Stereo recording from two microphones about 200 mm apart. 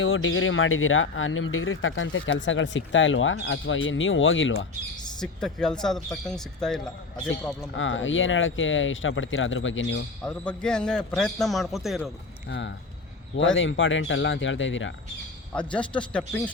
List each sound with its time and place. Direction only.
0.0 s speech: 80° left
5.2 s a man's voice: 5° left (ahead or behind)
7.8 s speech: 70° left (ahead or behind)
10.2 s a man's voice: 5° left (ahead or behind)
12.5 s speech: 60° left (ahead or behind)
13.3 s speech: 70° left (ahead or behind)
15.5 s a man's voice: 5° left (ahead or behind)